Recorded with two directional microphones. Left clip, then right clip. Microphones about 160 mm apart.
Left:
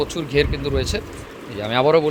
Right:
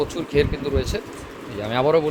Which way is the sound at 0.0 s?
5° right (ahead or behind).